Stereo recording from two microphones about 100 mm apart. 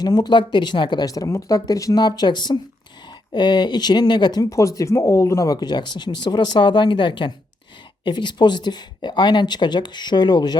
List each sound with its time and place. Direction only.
0.0 s speech: 45° left (ahead or behind)
4.4 s speech: 30° left (ahead or behind)